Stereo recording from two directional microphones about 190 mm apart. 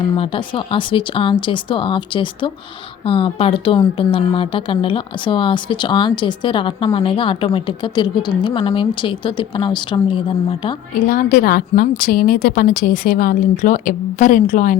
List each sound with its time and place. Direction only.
0.2 s speech: 25° left (ahead or behind)
11.0 s a woman's voice: 50° left (ahead or behind)